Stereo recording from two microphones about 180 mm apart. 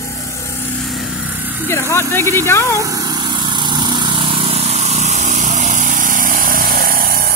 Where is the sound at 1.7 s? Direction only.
15° left (ahead or behind).